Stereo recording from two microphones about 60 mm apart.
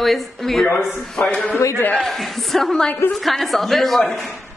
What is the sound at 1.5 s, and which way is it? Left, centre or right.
Speech, left.